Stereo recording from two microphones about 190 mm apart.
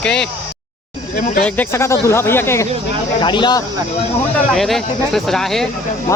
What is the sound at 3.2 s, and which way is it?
Speech, 25° left (ahead or behind).